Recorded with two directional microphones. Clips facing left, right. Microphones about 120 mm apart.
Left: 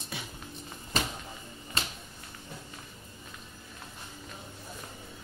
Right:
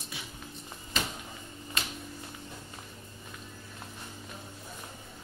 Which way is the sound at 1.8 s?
30° left (ahead or behind).